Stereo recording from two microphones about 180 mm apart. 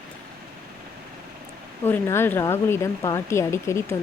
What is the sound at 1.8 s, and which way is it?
Speech, 15° left (ahead or behind).